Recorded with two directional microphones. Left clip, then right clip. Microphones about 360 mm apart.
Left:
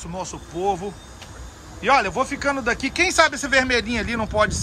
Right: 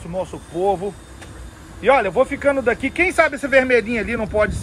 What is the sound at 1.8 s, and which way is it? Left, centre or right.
Speech, centre.